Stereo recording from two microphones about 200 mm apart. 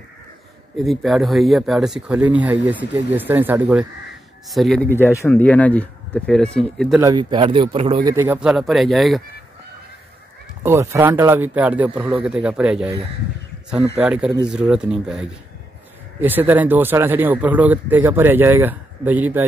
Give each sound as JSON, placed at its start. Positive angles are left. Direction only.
{"t": 0.8, "sound": "speech", "side_deg": 0}
{"t": 4.9, "sound": "speech", "side_deg": 10}
{"t": 7.0, "sound": "a man's voice", "side_deg": -20}
{"t": 10.6, "sound": "a man's voice", "side_deg": -10}
{"t": 13.9, "sound": "a man's voice", "side_deg": -5}